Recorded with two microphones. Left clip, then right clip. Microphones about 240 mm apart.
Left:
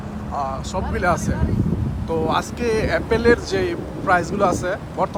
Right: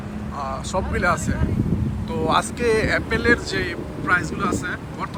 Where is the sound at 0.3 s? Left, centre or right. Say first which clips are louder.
Left 1 dB; centre.